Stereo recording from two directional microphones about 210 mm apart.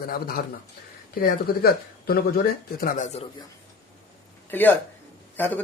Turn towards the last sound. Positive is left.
turn(degrees=10)  # may be behind; listen again after turning